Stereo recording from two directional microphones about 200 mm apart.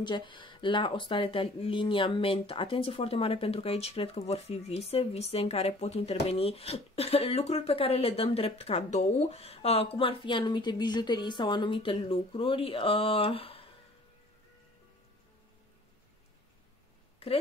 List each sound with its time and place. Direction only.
0.0 s speech: 25° left (ahead or behind)